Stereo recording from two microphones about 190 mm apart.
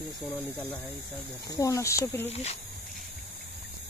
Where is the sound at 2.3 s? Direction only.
35° left (ahead or behind).